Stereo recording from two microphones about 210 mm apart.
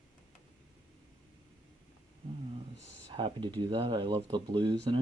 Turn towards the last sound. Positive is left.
turn(degrees=-20)  # may be behind; listen again after turning